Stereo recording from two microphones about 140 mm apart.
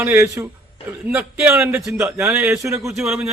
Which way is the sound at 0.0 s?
15° right (ahead or behind).